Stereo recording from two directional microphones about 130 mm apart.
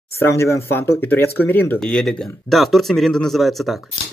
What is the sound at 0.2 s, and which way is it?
Speech, 20° left (ahead or behind).